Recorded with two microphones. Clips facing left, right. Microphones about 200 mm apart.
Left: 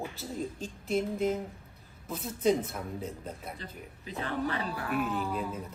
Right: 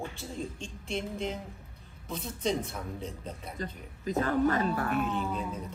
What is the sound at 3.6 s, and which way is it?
Speech, 45° right (ahead or behind).